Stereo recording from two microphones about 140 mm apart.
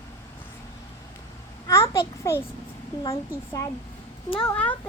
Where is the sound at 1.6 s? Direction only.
20° left (ahead or behind).